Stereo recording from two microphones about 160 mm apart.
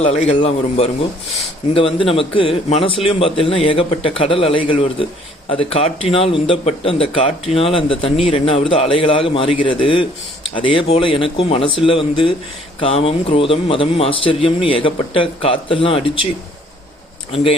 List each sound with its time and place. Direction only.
0.0 s a man's voice: 45° left (ahead or behind)